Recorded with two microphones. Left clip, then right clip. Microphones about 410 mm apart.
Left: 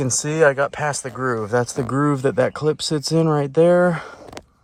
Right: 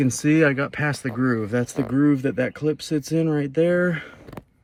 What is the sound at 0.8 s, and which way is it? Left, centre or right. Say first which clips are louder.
Speech: left 2 dB; centre.